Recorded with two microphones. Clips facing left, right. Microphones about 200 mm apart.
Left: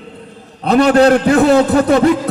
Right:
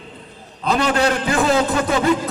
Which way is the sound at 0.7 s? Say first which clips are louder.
Left 9 dB; 40° left (ahead or behind).